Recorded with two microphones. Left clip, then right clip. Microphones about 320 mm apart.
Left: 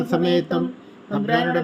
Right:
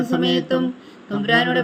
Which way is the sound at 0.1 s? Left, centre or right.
Centre.